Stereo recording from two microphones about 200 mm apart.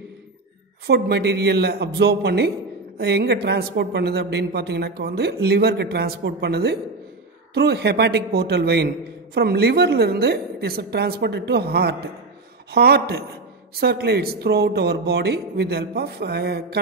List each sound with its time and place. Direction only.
0.8 s a woman's voice: 55° right (ahead or behind)